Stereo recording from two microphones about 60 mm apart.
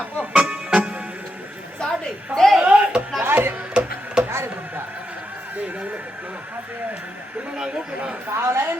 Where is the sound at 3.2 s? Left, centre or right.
Right.